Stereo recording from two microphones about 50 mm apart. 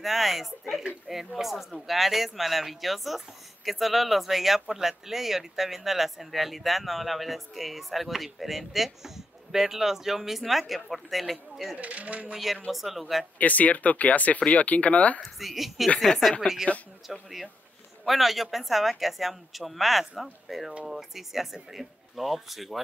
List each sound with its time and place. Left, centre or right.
0.0 s speech: centre
11.7 s speech: right
12.6 s speech: centre
13.4 s speech: left
15.2 s speech: centre